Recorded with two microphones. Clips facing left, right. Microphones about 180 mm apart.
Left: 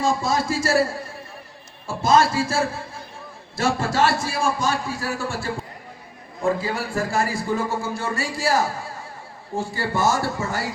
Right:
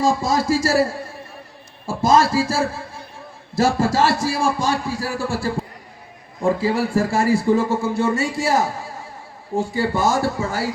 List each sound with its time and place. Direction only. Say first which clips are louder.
0.0 s speech: right 3 dB; 35° right (ahead or behind)
1.9 s speech: right 2 dB; 35° right (ahead or behind)
3.9 s speech: right 2 dB; 35° right (ahead or behind); by 10.7 s 10° right (ahead or behind)